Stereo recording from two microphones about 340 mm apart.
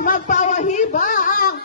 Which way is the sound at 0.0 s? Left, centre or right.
Left.